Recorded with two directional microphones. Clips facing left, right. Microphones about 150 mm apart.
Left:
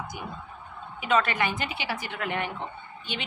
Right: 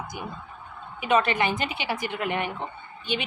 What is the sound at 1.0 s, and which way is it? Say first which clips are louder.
A woman's voice: right 2 dB; 20° right (ahead or behind).